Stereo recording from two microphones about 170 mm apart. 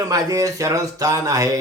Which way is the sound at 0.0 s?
20° right (ahead or behind).